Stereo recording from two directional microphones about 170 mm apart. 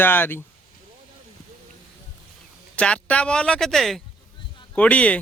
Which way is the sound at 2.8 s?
5° left (ahead or behind).